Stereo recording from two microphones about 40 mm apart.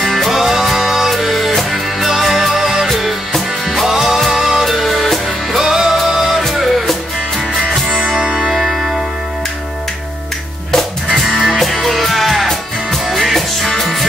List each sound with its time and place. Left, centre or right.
0.0 s music: centre
0.3 s music: centre
4.6 s music: centre
5.6 s music: centre
8.2 s music: centre
8.5 s music: centre
11.4 s music: centre